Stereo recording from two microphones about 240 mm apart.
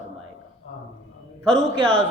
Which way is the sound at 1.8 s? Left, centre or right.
Centre.